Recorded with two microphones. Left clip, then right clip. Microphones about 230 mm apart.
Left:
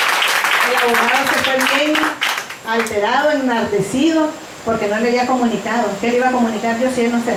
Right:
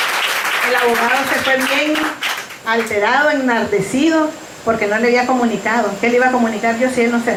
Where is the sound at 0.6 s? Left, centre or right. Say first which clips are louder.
Even; centre.